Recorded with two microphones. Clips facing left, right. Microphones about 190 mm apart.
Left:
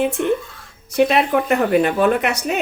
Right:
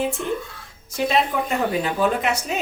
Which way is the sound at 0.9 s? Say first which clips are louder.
Left 6 dB; 65° left (ahead or behind).